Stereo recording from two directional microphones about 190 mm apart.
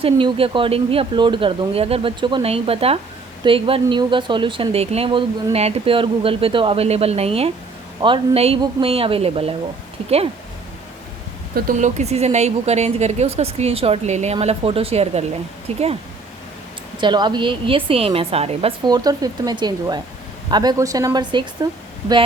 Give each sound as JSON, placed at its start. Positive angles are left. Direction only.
{"t": 0.0, "sound": "speech", "side_deg": -30}
{"t": 11.5, "sound": "speech", "side_deg": -45}
{"t": 17.0, "sound": "speech", "side_deg": -25}